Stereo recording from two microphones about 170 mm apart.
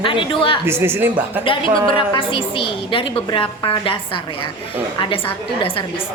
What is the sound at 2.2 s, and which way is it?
A woman's voice, 30° left (ahead or behind).